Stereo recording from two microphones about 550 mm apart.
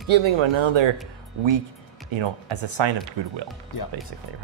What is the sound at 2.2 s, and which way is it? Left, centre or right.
Speech, right.